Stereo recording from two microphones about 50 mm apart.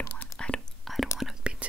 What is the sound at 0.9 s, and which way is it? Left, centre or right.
Whispering, centre.